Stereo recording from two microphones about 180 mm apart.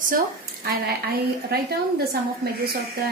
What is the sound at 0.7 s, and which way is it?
A woman's voice, 60° right (ahead or behind).